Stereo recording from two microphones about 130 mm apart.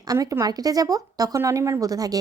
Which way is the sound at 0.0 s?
25° right (ahead or behind).